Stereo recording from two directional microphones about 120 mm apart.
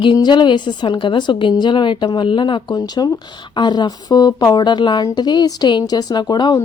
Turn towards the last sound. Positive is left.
turn(degrees=35)  # may be behind; listen again after turning